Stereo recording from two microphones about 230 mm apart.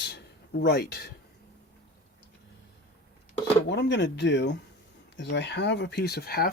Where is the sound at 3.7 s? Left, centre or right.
Left.